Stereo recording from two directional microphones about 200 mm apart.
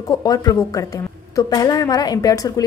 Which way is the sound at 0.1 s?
20° left (ahead or behind).